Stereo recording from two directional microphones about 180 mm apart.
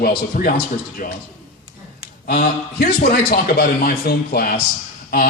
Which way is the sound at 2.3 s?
50° left (ahead or behind).